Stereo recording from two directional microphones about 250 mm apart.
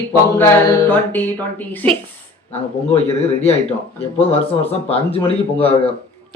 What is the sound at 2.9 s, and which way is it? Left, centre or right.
Speech, left.